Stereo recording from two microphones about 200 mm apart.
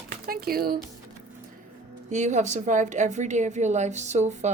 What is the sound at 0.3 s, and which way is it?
Speech, 50° right (ahead or behind).